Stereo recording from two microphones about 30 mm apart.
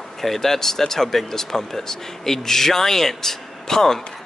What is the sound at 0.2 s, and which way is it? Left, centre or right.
Speech, centre.